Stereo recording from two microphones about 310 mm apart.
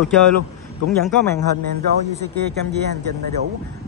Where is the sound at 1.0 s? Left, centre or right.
Centre.